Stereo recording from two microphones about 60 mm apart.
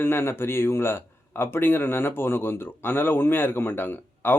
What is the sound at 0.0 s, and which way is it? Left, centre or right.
A man's voice, left.